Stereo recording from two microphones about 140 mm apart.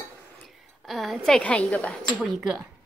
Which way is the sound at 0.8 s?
Centre (ahead or behind).